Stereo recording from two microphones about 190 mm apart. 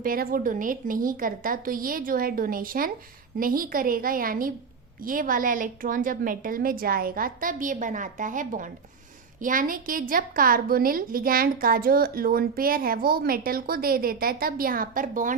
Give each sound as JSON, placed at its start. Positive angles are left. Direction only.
{"t": 0.0, "sound": "a woman's voice", "side_deg": -50}